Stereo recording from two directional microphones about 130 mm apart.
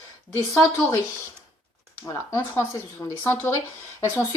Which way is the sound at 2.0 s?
30° left (ahead or behind).